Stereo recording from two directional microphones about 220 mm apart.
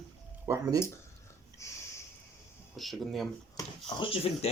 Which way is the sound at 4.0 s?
25° left (ahead or behind).